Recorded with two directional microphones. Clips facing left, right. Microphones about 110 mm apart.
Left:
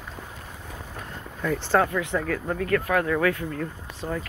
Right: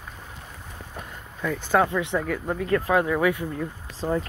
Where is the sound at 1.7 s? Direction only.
5° right (ahead or behind).